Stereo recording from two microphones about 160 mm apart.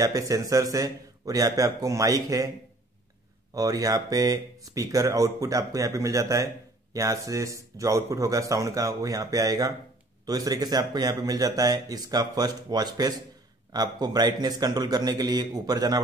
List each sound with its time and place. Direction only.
0.0 s speech: 20° right (ahead or behind)
3.5 s speech: 20° right (ahead or behind)